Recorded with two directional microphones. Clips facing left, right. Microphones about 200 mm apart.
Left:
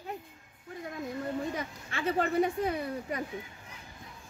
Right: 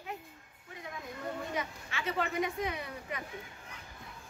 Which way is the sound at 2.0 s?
35° left (ahead or behind).